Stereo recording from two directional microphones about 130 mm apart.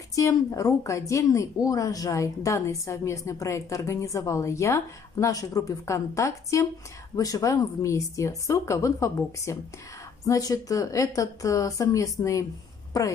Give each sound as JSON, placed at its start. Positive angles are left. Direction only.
{"t": 0.1, "sound": "a woman's voice", "side_deg": 25}